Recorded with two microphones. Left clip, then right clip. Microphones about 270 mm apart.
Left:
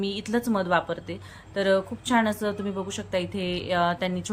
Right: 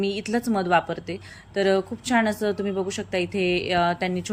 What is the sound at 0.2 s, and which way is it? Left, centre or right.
Speech, centre.